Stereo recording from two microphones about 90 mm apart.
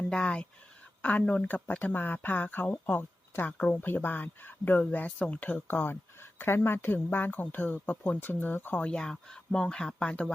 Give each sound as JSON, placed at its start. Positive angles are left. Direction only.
{"t": 0.1, "sound": "speech", "side_deg": 10}